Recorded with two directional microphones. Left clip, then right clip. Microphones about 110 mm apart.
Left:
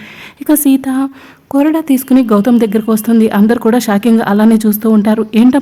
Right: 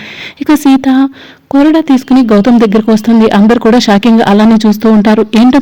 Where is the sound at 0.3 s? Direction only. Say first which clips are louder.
Right 3 dB; 25° right (ahead or behind).